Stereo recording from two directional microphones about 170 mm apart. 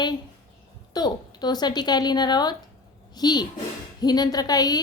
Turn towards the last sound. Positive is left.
turn(degrees=20)  # may be behind; listen again after turning